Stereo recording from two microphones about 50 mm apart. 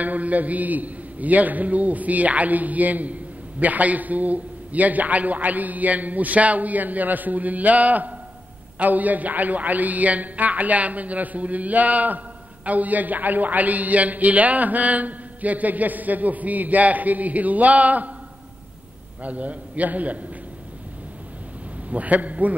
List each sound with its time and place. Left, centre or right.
0.0 s a man's voice: right
19.2 s a man's voice: right
21.9 s a man's voice: right